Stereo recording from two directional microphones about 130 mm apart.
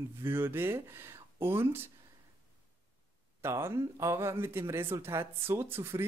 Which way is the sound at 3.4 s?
20° right (ahead or behind).